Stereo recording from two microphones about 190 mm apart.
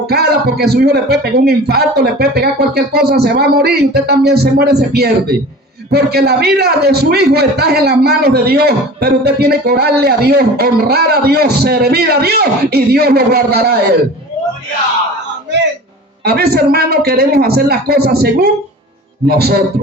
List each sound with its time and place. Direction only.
0.1 s a man's voice: 55° right (ahead or behind)
16.2 s a man's voice: 55° right (ahead or behind)